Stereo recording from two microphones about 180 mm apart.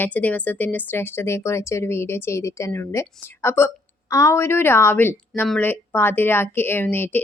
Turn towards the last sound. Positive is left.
turn(degrees=10)  # may be behind; listen again after turning